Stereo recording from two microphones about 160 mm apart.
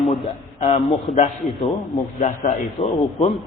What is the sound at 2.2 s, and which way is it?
A man's voice, 45° left (ahead or behind).